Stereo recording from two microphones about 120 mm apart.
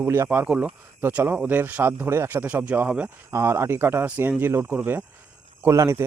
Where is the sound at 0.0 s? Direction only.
20° right (ahead or behind).